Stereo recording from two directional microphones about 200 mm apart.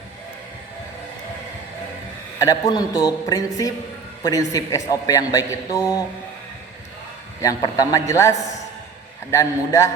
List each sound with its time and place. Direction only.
2.4 s a woman's voice: 20° left (ahead or behind)
7.4 s a man's voice: 20° left (ahead or behind)